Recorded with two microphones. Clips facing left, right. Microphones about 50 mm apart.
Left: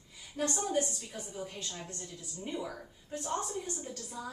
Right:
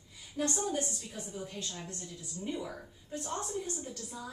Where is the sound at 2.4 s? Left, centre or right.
Centre.